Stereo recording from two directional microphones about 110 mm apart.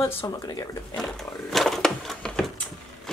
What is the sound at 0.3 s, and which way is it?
Speech, 30° left (ahead or behind).